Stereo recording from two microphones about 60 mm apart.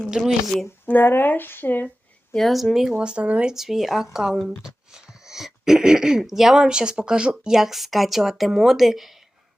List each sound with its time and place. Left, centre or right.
0.3 s speech: centre
0.9 s speech: left
2.3 s speech: centre
3.0 s speech: centre
3.5 s speech: centre